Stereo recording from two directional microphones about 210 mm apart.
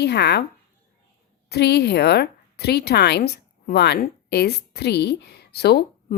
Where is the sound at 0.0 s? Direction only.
50° left (ahead or behind).